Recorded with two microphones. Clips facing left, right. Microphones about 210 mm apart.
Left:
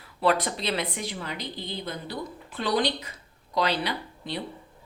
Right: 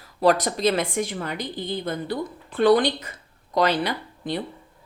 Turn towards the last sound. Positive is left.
turn(degrees=-45)  # may be behind; listen again after turning